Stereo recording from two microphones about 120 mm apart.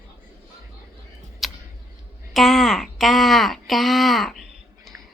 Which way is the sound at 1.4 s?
Centre (ahead or behind).